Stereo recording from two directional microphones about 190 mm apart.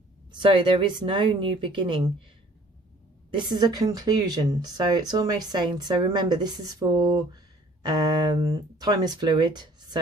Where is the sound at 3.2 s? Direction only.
25° right (ahead or behind).